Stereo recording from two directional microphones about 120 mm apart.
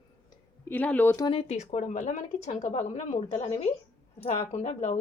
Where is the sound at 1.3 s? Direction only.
65° left (ahead or behind).